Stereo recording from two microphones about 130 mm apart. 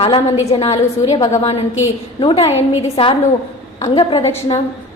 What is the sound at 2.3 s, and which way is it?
A woman's voice, 50° left (ahead or behind).